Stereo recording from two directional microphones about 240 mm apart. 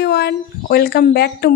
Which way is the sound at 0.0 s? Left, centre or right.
Left.